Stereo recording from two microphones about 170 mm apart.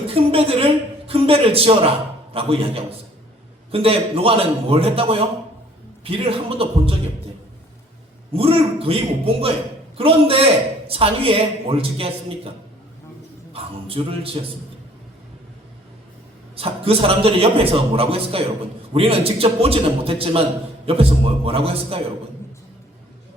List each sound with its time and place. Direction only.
0.1 s a man's voice: 35° right (ahead or behind)
8.3 s a man's voice: 35° right (ahead or behind)
13.5 s a sound: 35° right (ahead or behind)
16.6 s a man's voice: 35° right (ahead or behind)